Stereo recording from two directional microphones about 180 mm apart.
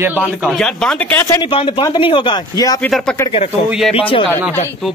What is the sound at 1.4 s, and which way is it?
A man's voice, 30° left (ahead or behind).